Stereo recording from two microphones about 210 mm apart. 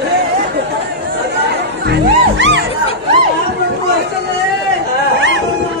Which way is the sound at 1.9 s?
60° right (ahead or behind).